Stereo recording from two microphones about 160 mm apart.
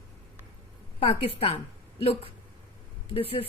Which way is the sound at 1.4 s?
40° left (ahead or behind).